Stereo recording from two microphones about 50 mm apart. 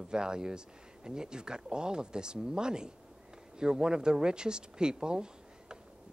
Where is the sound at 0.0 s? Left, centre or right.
Centre.